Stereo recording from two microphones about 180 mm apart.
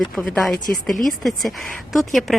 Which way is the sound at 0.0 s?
Centre (ahead or behind).